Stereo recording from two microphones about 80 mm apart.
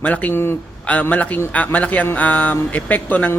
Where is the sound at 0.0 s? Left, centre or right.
Centre.